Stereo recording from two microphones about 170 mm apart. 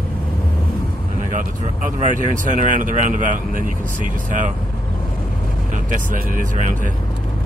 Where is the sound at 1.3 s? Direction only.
50° right (ahead or behind).